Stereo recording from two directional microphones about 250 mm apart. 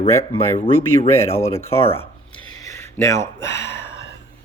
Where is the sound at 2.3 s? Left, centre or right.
Centre.